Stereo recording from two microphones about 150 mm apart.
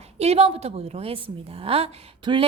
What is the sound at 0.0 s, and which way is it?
A woman's voice, 45° right (ahead or behind).